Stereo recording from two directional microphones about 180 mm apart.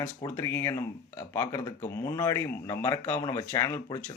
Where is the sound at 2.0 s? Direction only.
15° left (ahead or behind).